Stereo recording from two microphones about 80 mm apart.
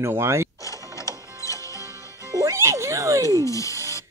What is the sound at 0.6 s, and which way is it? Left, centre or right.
Mechanisms, left.